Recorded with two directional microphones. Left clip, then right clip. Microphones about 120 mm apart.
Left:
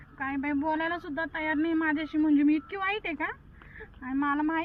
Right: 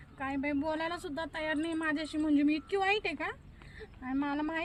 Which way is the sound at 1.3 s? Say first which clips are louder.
Left 6 dB; 55° right (ahead or behind).